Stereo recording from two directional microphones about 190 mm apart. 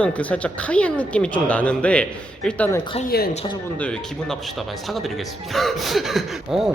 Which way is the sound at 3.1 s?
55° left (ahead or behind).